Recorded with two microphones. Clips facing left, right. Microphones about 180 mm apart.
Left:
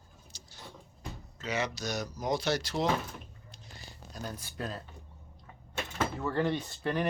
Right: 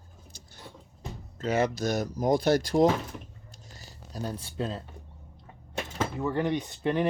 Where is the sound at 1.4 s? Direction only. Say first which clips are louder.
Right 8 dB; 50° right (ahead or behind).